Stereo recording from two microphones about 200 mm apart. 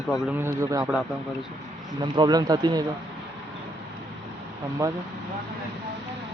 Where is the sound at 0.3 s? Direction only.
10° right (ahead or behind).